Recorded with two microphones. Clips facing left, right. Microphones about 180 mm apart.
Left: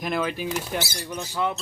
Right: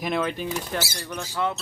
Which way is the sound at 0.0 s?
Centre (ahead or behind).